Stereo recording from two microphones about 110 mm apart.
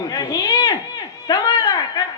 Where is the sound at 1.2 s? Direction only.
40° left (ahead or behind).